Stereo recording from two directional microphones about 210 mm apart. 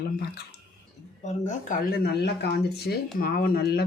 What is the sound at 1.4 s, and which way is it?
Speech, 45° left (ahead or behind).